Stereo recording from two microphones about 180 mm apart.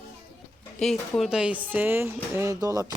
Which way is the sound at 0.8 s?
Centre (ahead or behind).